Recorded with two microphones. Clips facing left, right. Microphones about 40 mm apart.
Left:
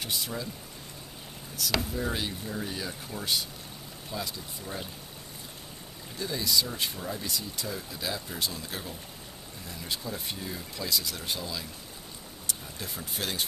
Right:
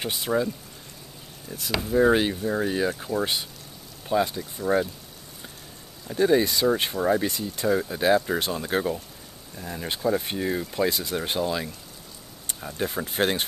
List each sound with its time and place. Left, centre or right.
0.0 s speech: right
2.0 s speech: right
6.1 s speech: right